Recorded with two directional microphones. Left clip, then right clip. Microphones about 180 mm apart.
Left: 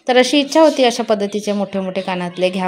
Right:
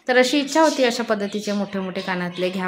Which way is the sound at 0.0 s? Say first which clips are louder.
Left 4 dB; 20° left (ahead or behind).